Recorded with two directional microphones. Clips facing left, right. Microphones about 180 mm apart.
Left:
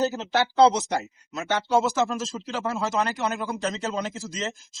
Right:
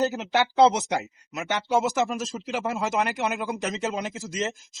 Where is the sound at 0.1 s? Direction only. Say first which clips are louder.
Even; 15° right (ahead or behind).